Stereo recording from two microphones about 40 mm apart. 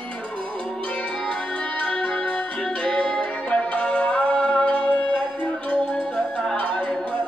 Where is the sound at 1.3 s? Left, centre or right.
Left.